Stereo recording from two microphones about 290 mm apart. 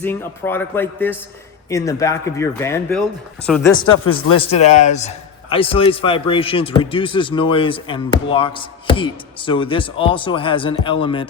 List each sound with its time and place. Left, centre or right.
0.0 s a man's voice: centre
4.0 s speech: left
4.4 s a man's voice: left